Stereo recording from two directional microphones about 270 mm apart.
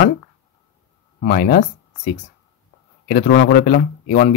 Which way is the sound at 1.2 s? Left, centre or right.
Left.